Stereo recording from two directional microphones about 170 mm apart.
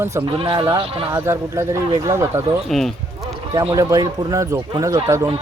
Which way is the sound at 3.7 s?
20° right (ahead or behind).